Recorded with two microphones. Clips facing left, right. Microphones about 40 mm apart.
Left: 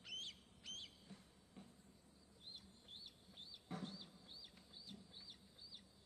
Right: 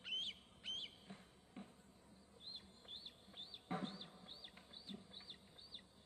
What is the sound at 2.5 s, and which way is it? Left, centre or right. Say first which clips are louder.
Bird: right 4 dB; right.